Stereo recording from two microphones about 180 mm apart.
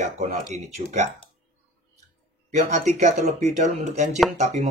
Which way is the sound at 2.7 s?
40° right (ahead or behind).